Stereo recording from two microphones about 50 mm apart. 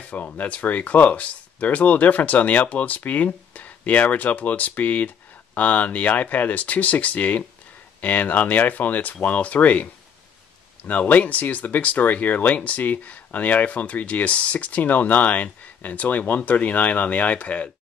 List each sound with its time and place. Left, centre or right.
0.0 s speech: left